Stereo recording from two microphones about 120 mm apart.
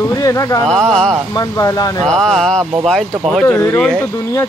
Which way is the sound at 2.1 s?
5° left (ahead or behind).